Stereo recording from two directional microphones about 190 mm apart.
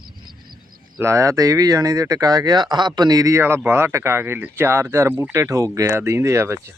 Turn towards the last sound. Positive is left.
turn(degrees=-15)  # may be behind; listen again after turning